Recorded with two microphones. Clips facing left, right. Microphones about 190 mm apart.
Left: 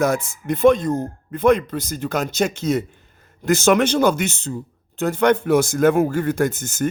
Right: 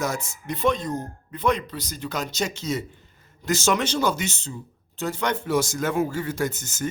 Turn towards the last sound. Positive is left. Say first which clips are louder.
# left 6 dB
turn(degrees=55)  # may be behind; listen again after turning